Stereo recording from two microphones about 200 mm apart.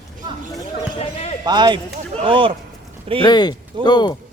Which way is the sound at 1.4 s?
20° right (ahead or behind).